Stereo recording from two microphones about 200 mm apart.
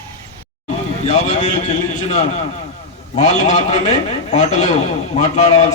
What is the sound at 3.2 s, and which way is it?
A man's voice, 35° left (ahead or behind).